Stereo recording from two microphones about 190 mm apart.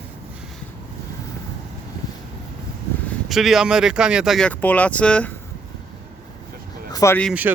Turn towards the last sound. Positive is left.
turn(degrees=15)  # may be behind; listen again after turning